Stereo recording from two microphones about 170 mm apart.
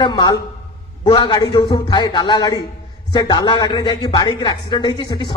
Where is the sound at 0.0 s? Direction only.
25° left (ahead or behind).